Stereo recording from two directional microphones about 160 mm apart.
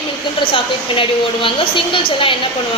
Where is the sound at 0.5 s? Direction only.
35° left (ahead or behind).